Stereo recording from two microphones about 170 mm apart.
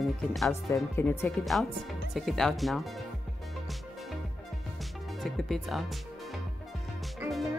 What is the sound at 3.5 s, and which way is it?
Music, centre (ahead or behind).